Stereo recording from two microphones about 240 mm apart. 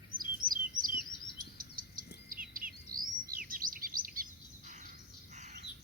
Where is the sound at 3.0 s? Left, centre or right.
Right.